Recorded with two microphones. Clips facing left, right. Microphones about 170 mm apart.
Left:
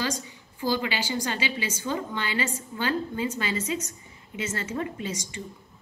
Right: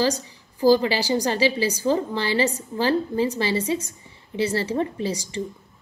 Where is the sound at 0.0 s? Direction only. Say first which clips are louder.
Right 8 dB; 35° right (ahead or behind).